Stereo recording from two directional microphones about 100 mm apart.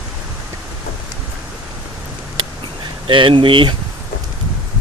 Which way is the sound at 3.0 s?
60° right (ahead or behind).